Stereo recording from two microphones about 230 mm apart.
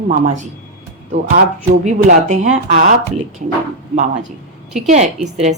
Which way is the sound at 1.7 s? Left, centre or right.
Right.